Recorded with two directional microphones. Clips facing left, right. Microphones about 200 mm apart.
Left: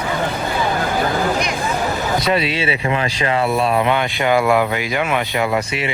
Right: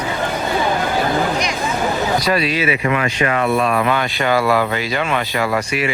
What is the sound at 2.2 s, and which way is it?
Speech, 25° left (ahead or behind).